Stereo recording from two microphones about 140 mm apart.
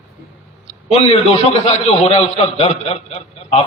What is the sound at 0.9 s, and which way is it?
A man's voice, 45° left (ahead or behind).